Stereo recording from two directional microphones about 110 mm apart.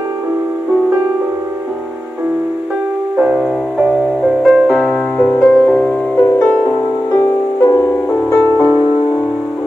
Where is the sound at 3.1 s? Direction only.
10° right (ahead or behind); by 5.4 s 15° left (ahead or behind).